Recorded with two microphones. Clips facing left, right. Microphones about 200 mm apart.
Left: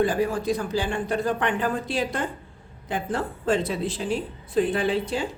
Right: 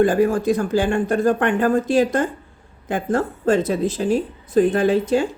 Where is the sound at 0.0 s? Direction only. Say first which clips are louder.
Right 7 dB; 50° right (ahead or behind).